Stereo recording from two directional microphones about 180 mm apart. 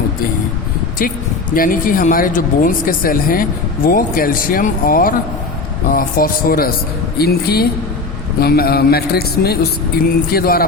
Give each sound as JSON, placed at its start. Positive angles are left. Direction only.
{"t": 0.9, "sound": "a man's voice", "side_deg": 50}